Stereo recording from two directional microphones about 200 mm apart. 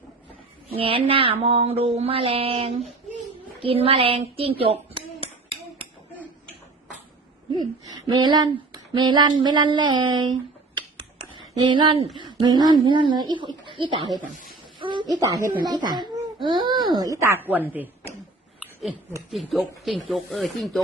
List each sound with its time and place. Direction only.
0.7 s mantra: 25° right (ahead or behind)
7.5 s mantra: 20° right (ahead or behind)
11.5 s mantra: 25° right (ahead or behind)
14.8 s a sound: 25° right (ahead or behind)
15.6 s mantra: 20° right (ahead or behind)
19.3 s speech: centre (ahead or behind)